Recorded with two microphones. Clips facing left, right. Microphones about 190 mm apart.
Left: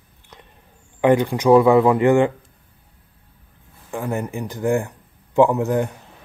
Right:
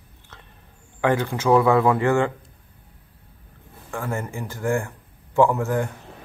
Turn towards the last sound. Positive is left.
turn(degrees=20)  # may be behind; listen again after turning